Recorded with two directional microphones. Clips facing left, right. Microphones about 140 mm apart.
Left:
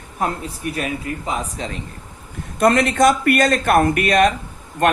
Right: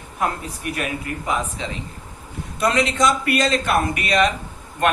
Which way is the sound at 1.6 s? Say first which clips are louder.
Left 1 dB; 45° left (ahead or behind).